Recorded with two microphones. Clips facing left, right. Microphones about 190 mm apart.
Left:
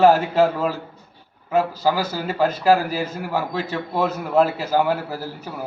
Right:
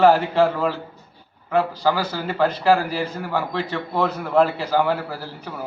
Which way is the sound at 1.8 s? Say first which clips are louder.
Even; 10° left (ahead or behind).